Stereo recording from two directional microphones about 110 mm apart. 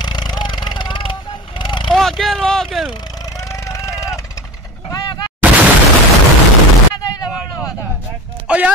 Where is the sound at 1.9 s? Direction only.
Centre (ahead or behind).